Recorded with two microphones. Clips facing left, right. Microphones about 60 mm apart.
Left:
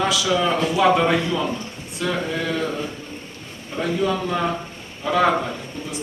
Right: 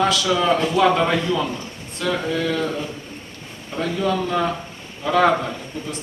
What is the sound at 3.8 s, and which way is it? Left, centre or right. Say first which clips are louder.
A man's voice: even; centre.